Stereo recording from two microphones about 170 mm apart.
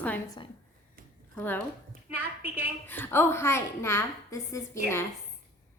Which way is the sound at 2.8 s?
10° left (ahead or behind).